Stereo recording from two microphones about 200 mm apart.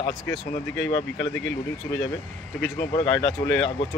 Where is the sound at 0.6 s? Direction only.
65° left (ahead or behind).